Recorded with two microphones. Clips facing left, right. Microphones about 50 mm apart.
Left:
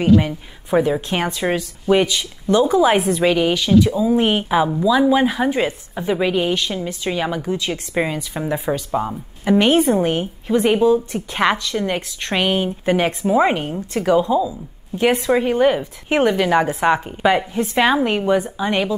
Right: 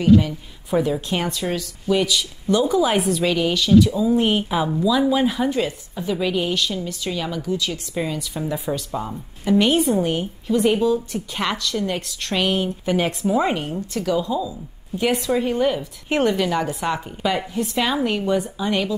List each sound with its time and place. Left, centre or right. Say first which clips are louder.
0.0 s a woman's voice: left 1 dB; left